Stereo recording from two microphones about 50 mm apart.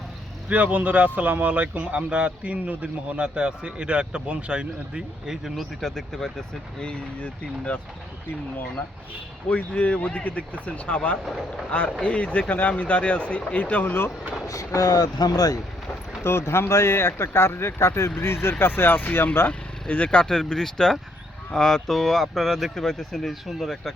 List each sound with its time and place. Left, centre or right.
0.4 s speech: right
5.2 s speech: centre
5.8 s speech: centre
6.8 s speech: left
9.5 s speech: left
11.3 s speech: centre
11.7 s speech: left
14.4 s speech: left
16.2 s speech: left
18.2 s speech: left
19.5 s speech: left
20.2 s speech: centre